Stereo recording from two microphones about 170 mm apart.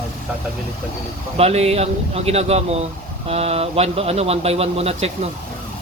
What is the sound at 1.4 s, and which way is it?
Speech, 40° right (ahead or behind).